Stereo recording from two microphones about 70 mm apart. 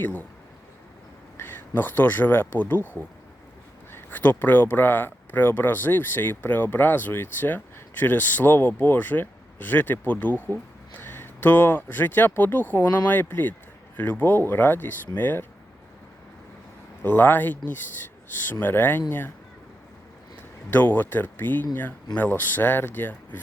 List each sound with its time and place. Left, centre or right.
0.0 s speech: left
1.4 s speech: left
3.9 s speech: left
17.0 s speech: left
20.7 s speech: left